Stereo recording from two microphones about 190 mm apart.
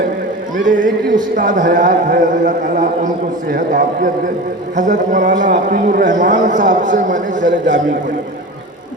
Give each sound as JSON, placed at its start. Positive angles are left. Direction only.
{"t": 0.5, "sound": "a man's voice", "side_deg": -45}
{"t": 7.4, "sound": "a man's voice", "side_deg": -70}